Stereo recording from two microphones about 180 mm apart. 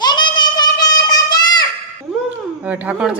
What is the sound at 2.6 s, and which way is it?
Speech, 5° right (ahead or behind).